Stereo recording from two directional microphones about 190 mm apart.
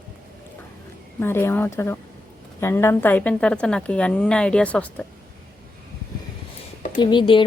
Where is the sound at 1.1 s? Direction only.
10° left (ahead or behind).